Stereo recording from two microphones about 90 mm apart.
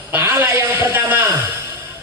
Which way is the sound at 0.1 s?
30° right (ahead or behind).